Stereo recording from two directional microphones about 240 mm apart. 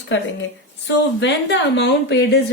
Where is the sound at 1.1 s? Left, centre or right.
Left.